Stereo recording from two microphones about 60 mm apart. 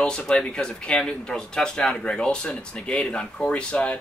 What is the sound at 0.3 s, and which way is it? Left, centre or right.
Speech, centre.